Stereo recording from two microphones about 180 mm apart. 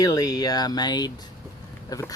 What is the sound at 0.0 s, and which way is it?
Speech, 20° left (ahead or behind).